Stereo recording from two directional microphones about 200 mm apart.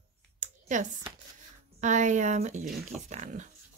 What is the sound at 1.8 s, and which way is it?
A woman's voice, 35° right (ahead or behind).